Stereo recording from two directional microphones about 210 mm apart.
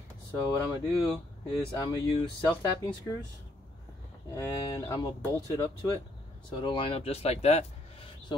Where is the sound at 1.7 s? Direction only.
20° left (ahead or behind).